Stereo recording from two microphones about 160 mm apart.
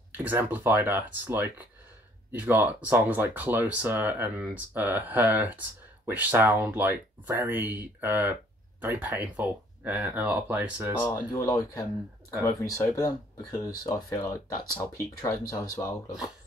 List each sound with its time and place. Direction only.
0.2 s speech: 10° right (ahead or behind)
11.1 s speech: 20° left (ahead or behind)